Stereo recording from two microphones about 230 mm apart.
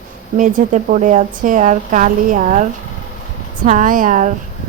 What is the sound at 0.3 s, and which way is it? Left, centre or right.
A woman's voice, right.